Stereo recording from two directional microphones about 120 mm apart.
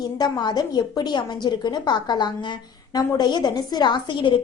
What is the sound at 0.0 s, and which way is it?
A woman's voice, 35° left (ahead or behind).